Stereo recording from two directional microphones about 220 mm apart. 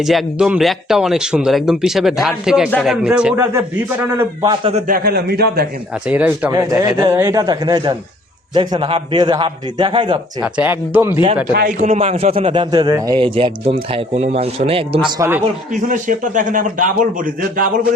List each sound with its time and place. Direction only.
0.0 s speech: centre (ahead or behind)
4.9 s a man's voice: 45° right (ahead or behind)
6.1 s a man's voice: 5° right (ahead or behind)
10.4 s speech: 5° right (ahead or behind)
11.5 s a man's voice: 40° right (ahead or behind)
15.7 s a man's voice: 35° right (ahead or behind)